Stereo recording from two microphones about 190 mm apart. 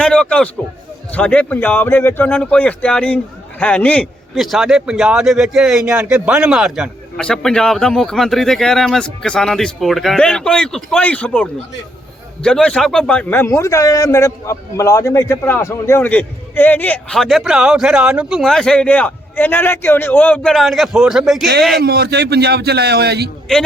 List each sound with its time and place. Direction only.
0.0 s a man's voice: 5° left (ahead or behind)
21.8 s a man's voice: 55° right (ahead or behind)